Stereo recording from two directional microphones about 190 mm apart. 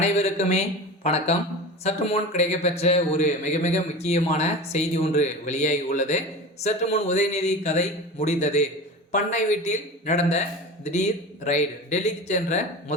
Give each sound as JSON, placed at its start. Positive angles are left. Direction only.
{"t": 0.0, "sound": "a man's voice", "side_deg": 35}